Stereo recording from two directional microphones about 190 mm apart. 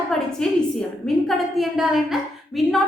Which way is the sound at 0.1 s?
5° left (ahead or behind).